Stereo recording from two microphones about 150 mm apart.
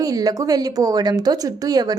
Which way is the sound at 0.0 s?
25° right (ahead or behind).